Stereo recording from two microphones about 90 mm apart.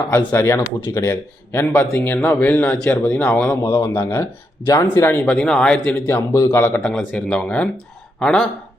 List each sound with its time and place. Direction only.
0.1 s speech: 30° left (ahead or behind)
1.1 s speech: 15° left (ahead or behind)
3.0 s speech: 30° left (ahead or behind)
5.2 s speech: 10° left (ahead or behind)
6.1 s speech: 30° left (ahead or behind)
6.8 s speech: 10° left (ahead or behind)